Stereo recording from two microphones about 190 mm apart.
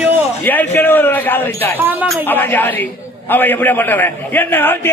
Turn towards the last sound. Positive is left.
turn(degrees=10)  # may be behind; listen again after turning